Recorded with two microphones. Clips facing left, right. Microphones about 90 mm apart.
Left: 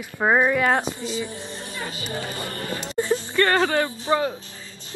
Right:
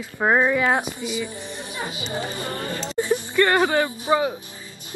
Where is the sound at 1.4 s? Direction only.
15° right (ahead or behind).